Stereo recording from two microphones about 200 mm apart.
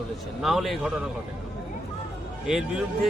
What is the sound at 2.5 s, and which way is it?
Speech, centre (ahead or behind).